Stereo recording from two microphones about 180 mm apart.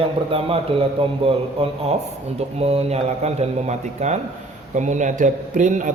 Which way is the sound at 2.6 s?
35° right (ahead or behind).